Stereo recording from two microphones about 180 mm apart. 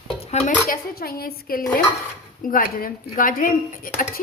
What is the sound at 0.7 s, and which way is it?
A woman's voice, 55° left (ahead or behind).